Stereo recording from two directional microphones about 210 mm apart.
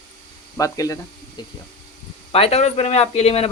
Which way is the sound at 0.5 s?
15° left (ahead or behind).